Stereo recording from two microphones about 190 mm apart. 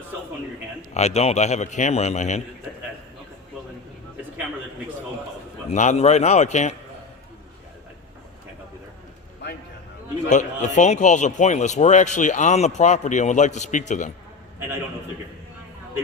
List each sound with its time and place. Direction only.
0.9 s a man's voice: 35° left (ahead or behind)
5.7 s a man's voice: 40° left (ahead or behind)
10.2 s a man's voice: 40° left (ahead or behind)